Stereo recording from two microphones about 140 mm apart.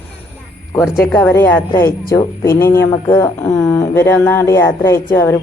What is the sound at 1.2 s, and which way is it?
A woman's voice, 15° left (ahead or behind).